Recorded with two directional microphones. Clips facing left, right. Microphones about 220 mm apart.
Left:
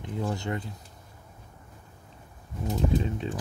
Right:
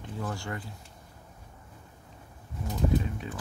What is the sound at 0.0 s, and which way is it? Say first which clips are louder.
Speech: left 5 dB; 20° left (ahead or behind).